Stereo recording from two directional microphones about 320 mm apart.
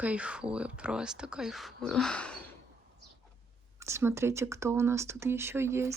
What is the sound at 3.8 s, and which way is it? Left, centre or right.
Speech, centre.